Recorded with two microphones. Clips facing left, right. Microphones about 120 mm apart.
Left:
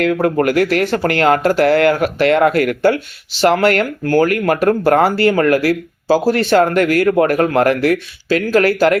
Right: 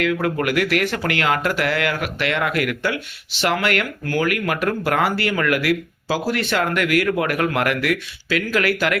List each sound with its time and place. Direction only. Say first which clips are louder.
0.0 s speech: left 6 dB; 40° left (ahead or behind)